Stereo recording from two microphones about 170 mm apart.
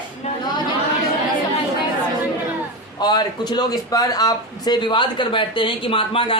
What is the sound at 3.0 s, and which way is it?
Speech, 25° left (ahead or behind).